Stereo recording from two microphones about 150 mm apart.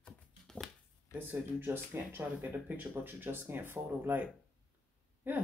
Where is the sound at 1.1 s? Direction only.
15° right (ahead or behind).